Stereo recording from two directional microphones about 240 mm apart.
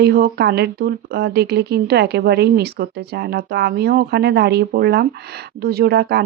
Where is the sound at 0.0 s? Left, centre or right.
Right.